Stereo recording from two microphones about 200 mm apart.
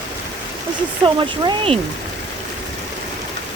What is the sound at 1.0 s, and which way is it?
Speech, 25° right (ahead or behind).